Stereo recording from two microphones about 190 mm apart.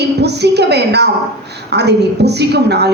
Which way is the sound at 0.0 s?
60° right (ahead or behind).